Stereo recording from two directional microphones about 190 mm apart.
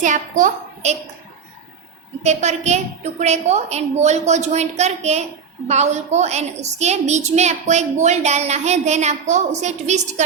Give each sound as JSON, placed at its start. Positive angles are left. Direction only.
{"t": 0.0, "sound": "a woman's voice", "side_deg": -40}
{"t": 2.2, "sound": "a woman's voice", "side_deg": -35}